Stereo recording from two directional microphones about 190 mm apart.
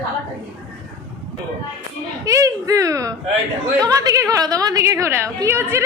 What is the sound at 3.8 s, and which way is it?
A woman's voice, 20° right (ahead or behind).